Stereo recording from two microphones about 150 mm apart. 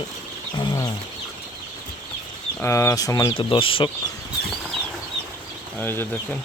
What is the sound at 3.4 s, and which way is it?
Speech, 35° left (ahead or behind).